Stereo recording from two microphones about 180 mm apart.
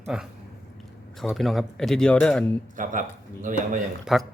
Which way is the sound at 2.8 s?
45° right (ahead or behind).